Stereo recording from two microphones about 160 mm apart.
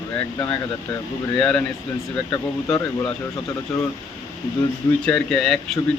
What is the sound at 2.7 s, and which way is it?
Speech, 15° left (ahead or behind).